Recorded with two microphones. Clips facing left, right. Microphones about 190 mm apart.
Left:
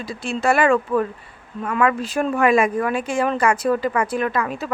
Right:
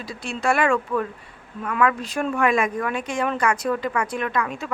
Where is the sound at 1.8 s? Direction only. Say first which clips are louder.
Left 2 dB; 5° left (ahead or behind).